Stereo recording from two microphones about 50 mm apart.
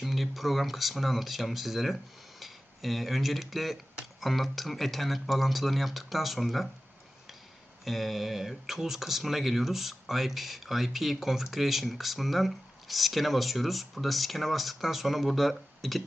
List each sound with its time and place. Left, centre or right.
0.0 s speech: centre
7.9 s speech: centre